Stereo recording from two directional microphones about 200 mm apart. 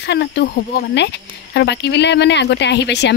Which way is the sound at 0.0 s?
60° left (ahead or behind).